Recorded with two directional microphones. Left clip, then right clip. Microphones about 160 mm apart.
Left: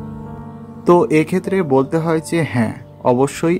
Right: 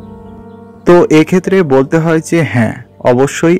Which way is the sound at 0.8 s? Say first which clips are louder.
Right 6 dB; 30° right (ahead or behind).